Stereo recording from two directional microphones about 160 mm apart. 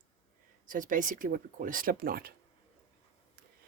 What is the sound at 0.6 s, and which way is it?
Speech, 55° right (ahead or behind).